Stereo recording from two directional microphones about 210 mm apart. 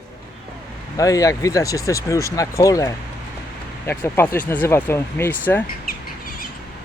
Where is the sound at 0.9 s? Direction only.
15° left (ahead or behind).